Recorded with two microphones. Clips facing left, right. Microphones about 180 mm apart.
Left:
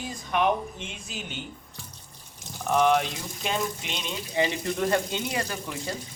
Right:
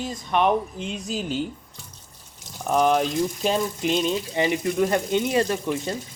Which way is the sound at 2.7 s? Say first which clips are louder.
Right 3 dB; 35° right (ahead or behind).